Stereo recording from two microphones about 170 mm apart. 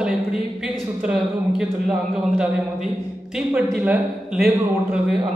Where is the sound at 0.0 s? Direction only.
5° right (ahead or behind).